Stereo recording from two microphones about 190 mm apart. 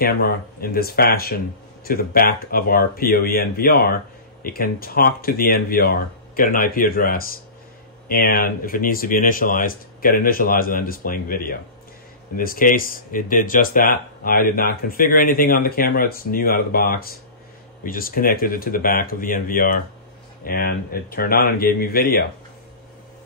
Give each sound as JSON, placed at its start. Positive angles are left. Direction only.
{"t": 0.0, "sound": "speech", "side_deg": 50}